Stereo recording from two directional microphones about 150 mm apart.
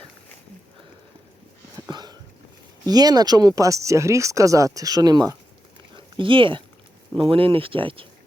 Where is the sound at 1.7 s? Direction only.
30° right (ahead or behind).